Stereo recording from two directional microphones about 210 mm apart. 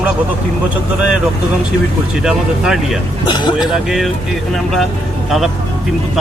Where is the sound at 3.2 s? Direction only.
20° left (ahead or behind).